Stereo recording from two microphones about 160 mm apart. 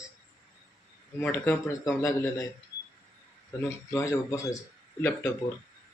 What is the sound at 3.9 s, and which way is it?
Speech, 20° left (ahead or behind).